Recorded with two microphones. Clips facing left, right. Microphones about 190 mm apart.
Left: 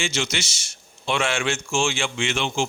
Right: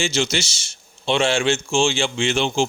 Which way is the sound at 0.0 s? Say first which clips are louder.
Right 5 dB; 30° right (ahead or behind).